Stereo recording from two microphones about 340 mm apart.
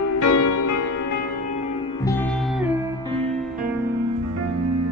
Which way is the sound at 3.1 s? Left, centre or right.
Right.